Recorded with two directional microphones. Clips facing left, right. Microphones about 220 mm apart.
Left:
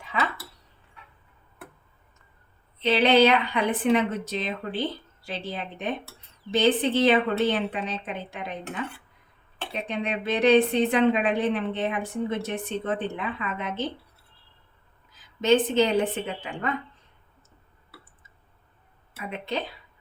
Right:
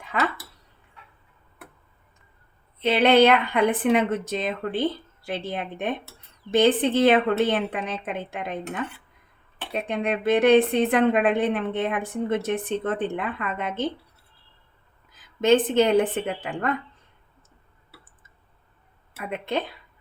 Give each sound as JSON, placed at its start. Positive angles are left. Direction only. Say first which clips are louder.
{"t": 2.8, "sound": "a woman's voice", "louder": "right 2 dB", "side_deg": -55}
{"t": 9.7, "sound": "a woman's voice", "louder": "right 4 dB", "side_deg": -55}
{"t": 15.4, "sound": "a woman's voice", "louder": "right 2 dB", "side_deg": -50}